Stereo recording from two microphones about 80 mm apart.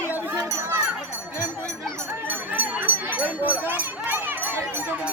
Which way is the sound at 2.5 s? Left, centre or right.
Right.